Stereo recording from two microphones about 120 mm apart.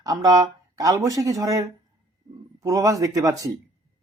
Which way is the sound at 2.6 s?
30° right (ahead or behind).